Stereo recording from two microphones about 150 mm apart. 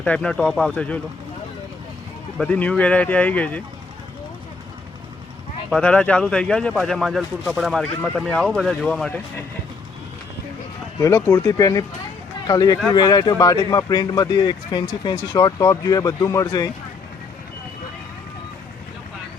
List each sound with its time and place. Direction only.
0.0 s speech: 5° left (ahead or behind)
2.4 s speech: 10° left (ahead or behind)
5.7 s speech: 10° left (ahead or behind)
11.0 s speech: 20° left (ahead or behind)